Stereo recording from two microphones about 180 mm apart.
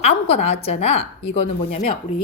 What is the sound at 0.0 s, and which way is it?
A woman's voice, 35° left (ahead or behind).